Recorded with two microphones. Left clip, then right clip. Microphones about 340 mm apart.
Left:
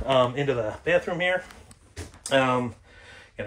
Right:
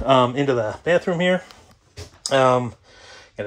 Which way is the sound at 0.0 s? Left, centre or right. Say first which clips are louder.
Right 5 dB; right.